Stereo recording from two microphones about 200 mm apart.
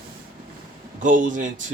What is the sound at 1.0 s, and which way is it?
Speech, 40° right (ahead or behind).